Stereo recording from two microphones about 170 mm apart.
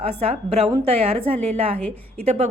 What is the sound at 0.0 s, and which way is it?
A woman's voice, 35° right (ahead or behind).